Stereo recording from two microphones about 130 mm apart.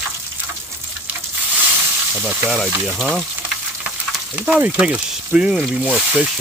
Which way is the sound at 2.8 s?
Centre (ahead or behind).